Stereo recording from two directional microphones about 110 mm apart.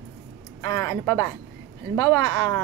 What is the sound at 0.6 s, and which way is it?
A woman's voice, 30° left (ahead or behind).